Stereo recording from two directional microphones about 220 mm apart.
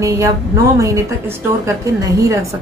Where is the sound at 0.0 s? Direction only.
15° right (ahead or behind).